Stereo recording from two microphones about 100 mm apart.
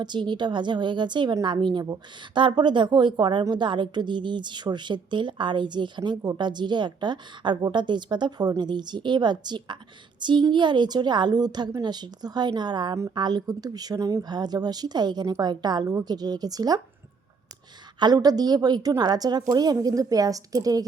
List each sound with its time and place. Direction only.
0.0 s a woman's voice: 50° right (ahead or behind)
18.0 s a woman's voice: 40° right (ahead or behind)